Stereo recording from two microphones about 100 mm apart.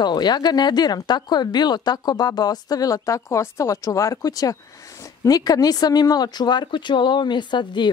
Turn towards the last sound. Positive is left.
turn(degrees=50)  # may be behind; listen again after turning